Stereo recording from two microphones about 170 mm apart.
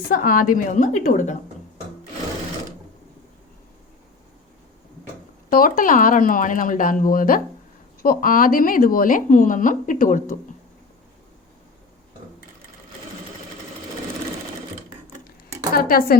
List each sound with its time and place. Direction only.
0.1 s a woman's voice: 55° left (ahead or behind)
5.5 s a woman's voice: 55° left (ahead or behind)
15.7 s speech: 60° left (ahead or behind)